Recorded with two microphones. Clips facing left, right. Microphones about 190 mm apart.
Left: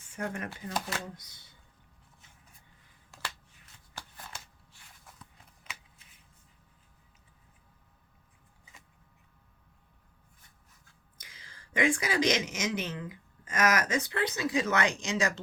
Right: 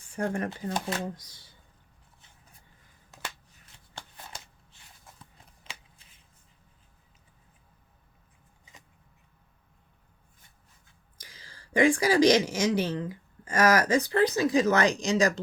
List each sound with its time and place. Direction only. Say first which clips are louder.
0.2 s speech: right 6 dB; 35° right (ahead or behind)
3.1 s finger snapping: right 1 dB; 20° right (ahead or behind)
5.0 s a sound: right 1 dB; 25° right (ahead or behind)
11.2 s a woman's voice: right 3 dB; 35° right (ahead or behind)